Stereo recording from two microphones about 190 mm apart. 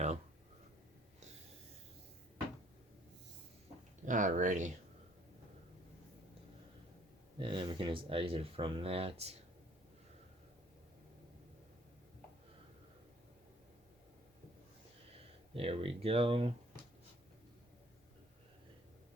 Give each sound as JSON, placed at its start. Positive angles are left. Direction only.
{"t": 4.0, "sound": "speech", "side_deg": -40}
{"t": 7.3, "sound": "speech", "side_deg": -25}
{"t": 15.5, "sound": "speech", "side_deg": -30}